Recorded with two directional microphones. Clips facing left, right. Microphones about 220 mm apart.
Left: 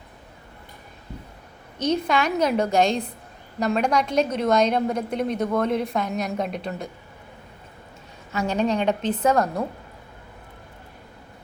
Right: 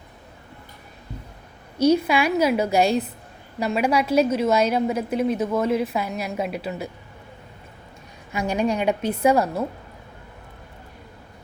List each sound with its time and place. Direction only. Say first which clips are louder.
1.8 s a woman's voice: right 4 dB; 10° right (ahead or behind)
8.3 s a woman's voice: even; 10° right (ahead or behind)